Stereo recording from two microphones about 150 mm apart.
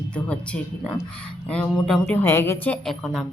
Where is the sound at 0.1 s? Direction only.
5° left (ahead or behind).